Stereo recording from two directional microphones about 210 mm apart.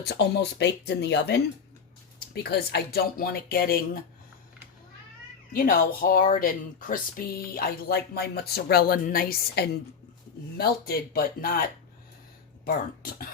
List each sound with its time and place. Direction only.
0.0 s speech: 50° left (ahead or behind)
5.5 s speech: 40° left (ahead or behind)
12.6 s speech: 45° left (ahead or behind)